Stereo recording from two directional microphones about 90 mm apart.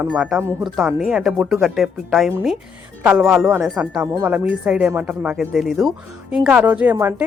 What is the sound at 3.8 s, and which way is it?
A woman's voice, 20° right (ahead or behind).